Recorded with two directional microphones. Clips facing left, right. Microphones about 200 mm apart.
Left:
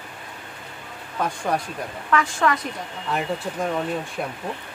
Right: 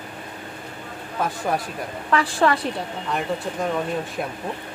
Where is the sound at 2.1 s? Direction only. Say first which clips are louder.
Right 2 dB; 35° right (ahead or behind).